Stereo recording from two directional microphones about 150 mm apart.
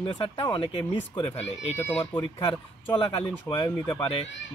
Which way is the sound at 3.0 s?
35° left (ahead or behind).